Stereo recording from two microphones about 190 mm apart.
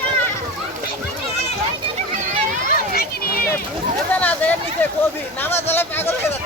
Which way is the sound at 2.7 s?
55° left (ahead or behind).